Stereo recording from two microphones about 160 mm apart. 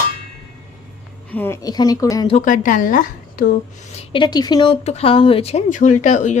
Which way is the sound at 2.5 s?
55° left (ahead or behind).